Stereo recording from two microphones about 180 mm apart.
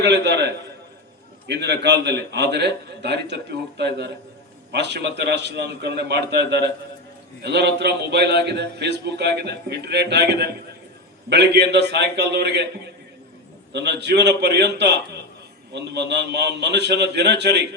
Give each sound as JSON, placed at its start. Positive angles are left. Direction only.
{"t": 0.0, "sound": "a man's voice", "side_deg": -70}
{"t": 13.7, "sound": "a man's voice", "side_deg": -70}